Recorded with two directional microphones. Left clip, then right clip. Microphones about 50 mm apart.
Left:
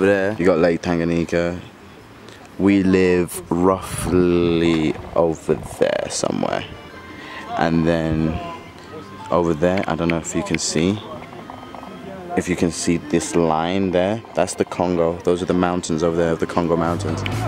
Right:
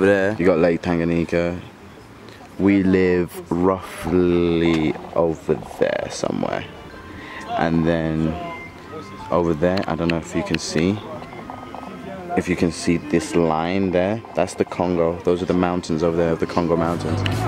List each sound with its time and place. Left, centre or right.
0.0 s speech: centre
0.4 s speech: centre
2.6 s speech: left
12.4 s speech: centre
16.5 s speech: left